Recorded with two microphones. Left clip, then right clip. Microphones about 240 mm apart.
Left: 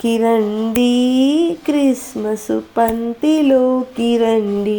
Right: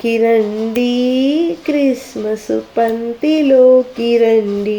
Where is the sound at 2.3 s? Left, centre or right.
Centre.